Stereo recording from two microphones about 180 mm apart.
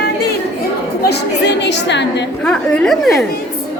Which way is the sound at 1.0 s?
70° left (ahead or behind).